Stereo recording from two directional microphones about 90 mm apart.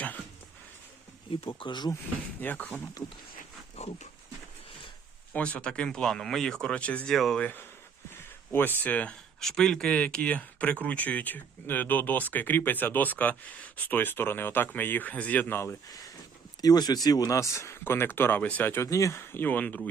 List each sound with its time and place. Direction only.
1.3 s speech: 75° left (ahead or behind)
2.4 s speech: 20° left (ahead or behind)
5.3 s speech: 15° left (ahead or behind)
8.1 s speech: 25° left (ahead or behind)
9.4 s speech: 5° left (ahead or behind); by 15.7 s 25° left (ahead or behind)
16.6 s speech: 45° left (ahead or behind); by 18.9 s 25° left (ahead or behind)
18.9 s speech: 35° left (ahead or behind); by 19.9 s 20° left (ahead or behind)